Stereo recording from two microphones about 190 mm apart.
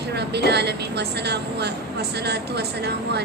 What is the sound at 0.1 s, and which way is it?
A woman's voice, 60° right (ahead or behind).